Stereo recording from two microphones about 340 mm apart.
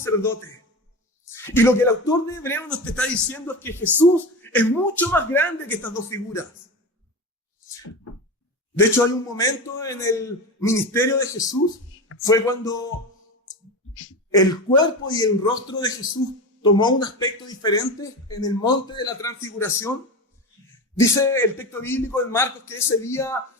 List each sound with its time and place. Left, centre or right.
0.0 s a man's voice: centre
8.7 s a man's voice: centre
13.9 s a sound: left
14.3 s a man's voice: centre
21.0 s a man's voice: centre